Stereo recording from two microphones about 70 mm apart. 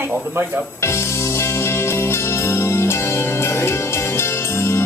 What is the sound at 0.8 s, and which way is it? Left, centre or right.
Music, left.